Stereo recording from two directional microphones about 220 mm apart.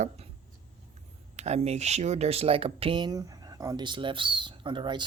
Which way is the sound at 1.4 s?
30° right (ahead or behind).